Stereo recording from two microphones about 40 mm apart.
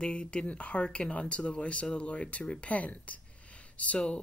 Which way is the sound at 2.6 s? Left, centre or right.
Left.